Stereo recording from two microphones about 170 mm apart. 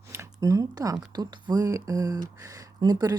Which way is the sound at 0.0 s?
15° right (ahead or behind).